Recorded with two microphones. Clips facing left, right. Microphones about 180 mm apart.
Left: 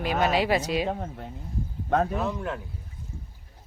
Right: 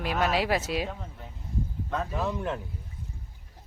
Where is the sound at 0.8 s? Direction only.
60° left (ahead or behind).